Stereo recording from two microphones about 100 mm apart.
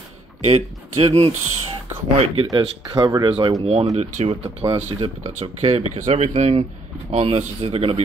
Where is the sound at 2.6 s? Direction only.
55° right (ahead or behind).